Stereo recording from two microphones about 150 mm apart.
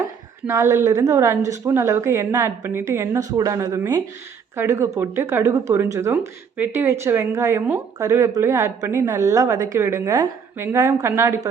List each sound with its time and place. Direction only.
0.4 s a woman's voice: 20° right (ahead or behind)